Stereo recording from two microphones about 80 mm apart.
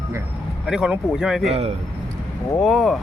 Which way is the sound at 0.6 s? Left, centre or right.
Centre.